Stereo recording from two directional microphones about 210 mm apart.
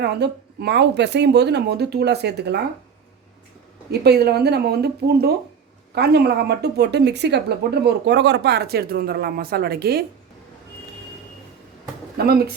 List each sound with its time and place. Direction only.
0.0 s speech: 55° right (ahead or behind)
4.0 s speech: 50° right (ahead or behind)
12.1 s speech: 50° right (ahead or behind)